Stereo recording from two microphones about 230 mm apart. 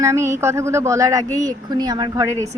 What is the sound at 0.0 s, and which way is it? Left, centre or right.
A woman's voice, centre.